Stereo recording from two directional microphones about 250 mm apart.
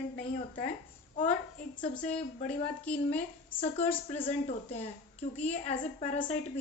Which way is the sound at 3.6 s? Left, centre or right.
Left.